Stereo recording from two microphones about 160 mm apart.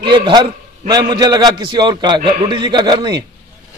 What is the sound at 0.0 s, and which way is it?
A man's voice, 30° right (ahead or behind).